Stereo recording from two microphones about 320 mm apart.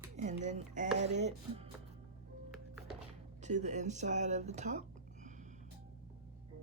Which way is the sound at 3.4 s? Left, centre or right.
Right.